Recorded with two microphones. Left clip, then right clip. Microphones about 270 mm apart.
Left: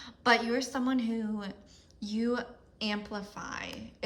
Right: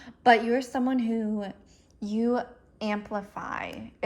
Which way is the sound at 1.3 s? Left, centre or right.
Centre.